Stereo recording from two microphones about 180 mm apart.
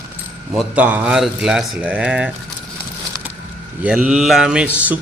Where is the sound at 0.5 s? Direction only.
5° right (ahead or behind).